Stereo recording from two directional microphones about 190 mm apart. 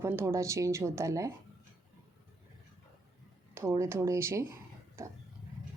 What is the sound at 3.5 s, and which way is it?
Speech, 15° right (ahead or behind).